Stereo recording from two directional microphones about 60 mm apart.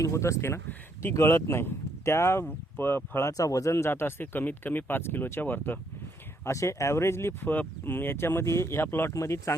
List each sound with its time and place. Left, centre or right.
0.0 s speech: left
2.7 s speech: left
3.2 s speech: left
6.4 s speech: left
7.5 s speech: left
9.1 s speech: left